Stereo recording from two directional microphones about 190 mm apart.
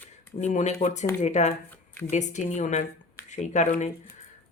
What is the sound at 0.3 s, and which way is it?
Speech, 40° left (ahead or behind).